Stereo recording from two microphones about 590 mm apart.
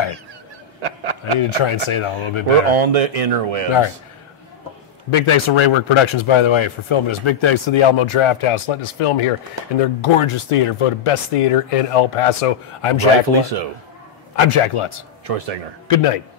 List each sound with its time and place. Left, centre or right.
0.8 s a man's voice: right
1.6 s speech: left
2.7 s speech: right
5.1 s speech: left
13.4 s a man's voice: right
14.3 s speech: left
15.2 s a man's voice: right
15.9 s speech: left